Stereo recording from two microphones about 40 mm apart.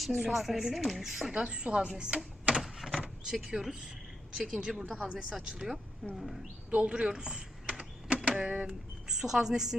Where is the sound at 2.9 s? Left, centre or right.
Centre.